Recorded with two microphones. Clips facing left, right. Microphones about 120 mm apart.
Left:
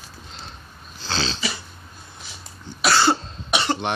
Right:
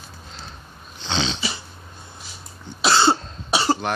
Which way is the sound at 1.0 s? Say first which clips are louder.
Right 2 dB; 20° right (ahead or behind).